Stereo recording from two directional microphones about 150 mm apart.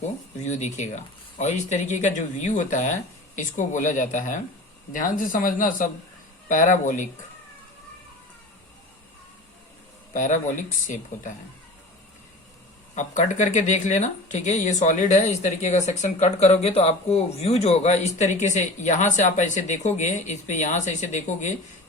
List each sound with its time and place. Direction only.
0.4 s speech: 50° left (ahead or behind)
10.1 s speech: 55° left (ahead or behind)
13.0 s speech: 55° left (ahead or behind)